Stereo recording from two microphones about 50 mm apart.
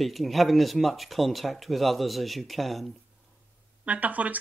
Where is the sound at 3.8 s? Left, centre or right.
Right.